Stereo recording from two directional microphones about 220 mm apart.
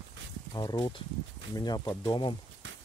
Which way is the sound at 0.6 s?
20° left (ahead or behind).